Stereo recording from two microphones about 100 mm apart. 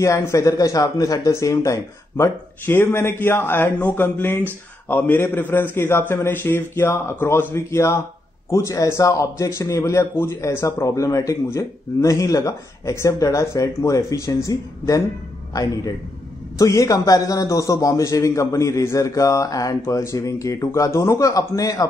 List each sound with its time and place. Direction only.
0.0 s a man's voice: 30° left (ahead or behind)